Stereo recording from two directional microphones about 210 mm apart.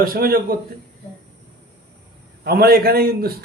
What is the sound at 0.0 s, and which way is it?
Speech, 45° right (ahead or behind).